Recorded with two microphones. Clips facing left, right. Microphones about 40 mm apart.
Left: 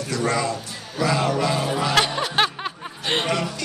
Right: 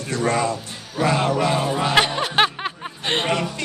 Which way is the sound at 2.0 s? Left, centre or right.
Centre.